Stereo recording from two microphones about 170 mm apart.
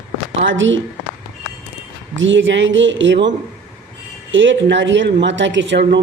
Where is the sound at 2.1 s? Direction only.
90° right.